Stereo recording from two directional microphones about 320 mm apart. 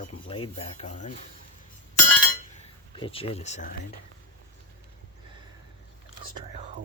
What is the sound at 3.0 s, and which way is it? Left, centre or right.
Speech, centre.